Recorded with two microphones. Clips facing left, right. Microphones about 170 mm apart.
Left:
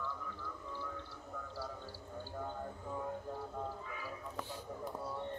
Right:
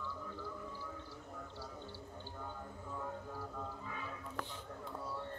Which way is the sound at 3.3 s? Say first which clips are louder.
Left 3 dB; 30° left (ahead or behind).